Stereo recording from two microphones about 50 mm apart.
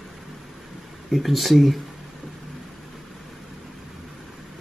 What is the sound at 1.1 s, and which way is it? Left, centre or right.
Speech, centre.